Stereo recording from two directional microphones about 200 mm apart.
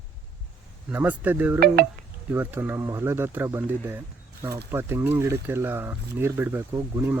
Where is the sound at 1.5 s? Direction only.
50° right (ahead or behind).